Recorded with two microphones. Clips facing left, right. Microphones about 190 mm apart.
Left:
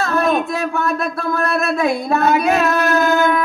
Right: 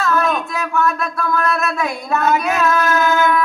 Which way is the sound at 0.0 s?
35° left (ahead or behind).